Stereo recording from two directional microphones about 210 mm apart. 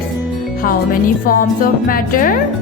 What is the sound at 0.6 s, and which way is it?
A woman's voice, 40° left (ahead or behind).